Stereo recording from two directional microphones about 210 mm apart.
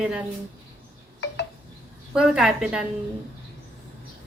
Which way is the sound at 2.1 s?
5° right (ahead or behind).